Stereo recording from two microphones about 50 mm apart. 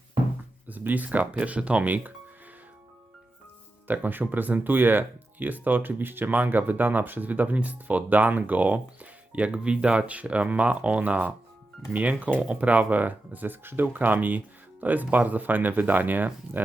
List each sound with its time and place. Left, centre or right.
0.7 s speech: right
3.8 s speech: right
12.4 s speech: right